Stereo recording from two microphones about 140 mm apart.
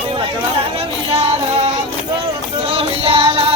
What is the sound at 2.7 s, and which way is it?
Music, 45° right (ahead or behind).